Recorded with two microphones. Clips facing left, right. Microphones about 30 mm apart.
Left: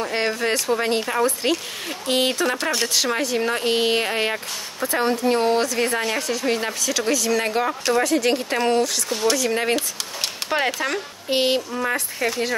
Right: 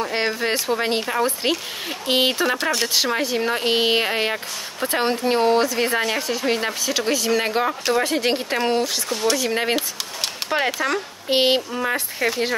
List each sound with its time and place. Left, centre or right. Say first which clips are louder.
0.0 s speech: even; centre
4.9 s speech: even; right
5.4 s speech: right 2 dB; centre
8.0 s speech: left 1 dB; right
8.5 s speech: left 1 dB; centre
9.1 s speech: even; centre
9.4 s speech: even; centre
10.5 s speech: right 1 dB; centre
11.2 s speech: right 2 dB; right
11.7 s speech: even; centre